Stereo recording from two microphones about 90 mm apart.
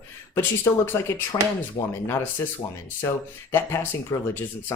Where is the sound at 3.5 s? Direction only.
25° left (ahead or behind).